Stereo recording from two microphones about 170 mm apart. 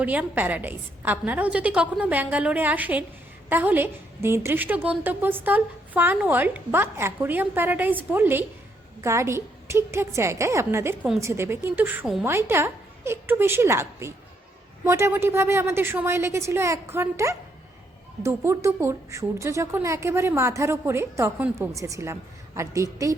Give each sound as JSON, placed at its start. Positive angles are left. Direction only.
{"t": 0.0, "sound": "a woman's voice", "side_deg": -10}